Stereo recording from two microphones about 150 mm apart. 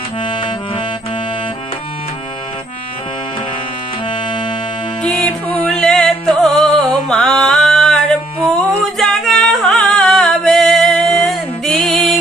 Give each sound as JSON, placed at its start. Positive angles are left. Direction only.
{"t": 0.2, "sound": "music", "side_deg": 35}
{"t": 4.0, "sound": "music", "side_deg": 35}
{"t": 5.0, "sound": "music", "side_deg": 10}